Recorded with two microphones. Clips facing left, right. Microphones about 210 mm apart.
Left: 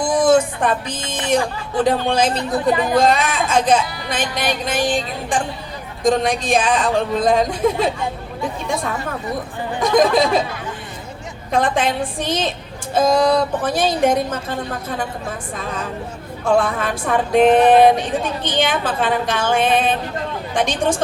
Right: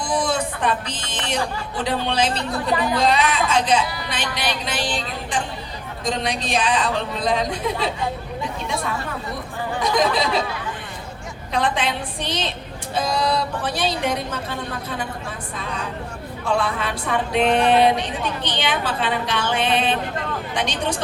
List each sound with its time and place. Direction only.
0.0 s a sound: 45° left (ahead or behind)
1.8 s speech: 45° left (ahead or behind)
2.4 s speech: 20° left (ahead or behind)
2.9 s speech: 45° left (ahead or behind)
11.5 s speech: 45° left (ahead or behind)
16.4 s speech: 45° left (ahead or behind)